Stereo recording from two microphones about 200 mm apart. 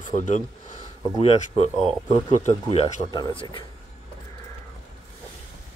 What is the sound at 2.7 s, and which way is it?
Speech, 25° left (ahead or behind).